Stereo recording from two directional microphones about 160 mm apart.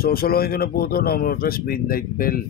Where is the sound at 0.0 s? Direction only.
70° left (ahead or behind).